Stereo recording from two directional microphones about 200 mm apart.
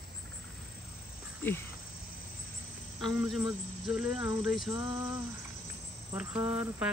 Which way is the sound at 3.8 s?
5° right (ahead or behind).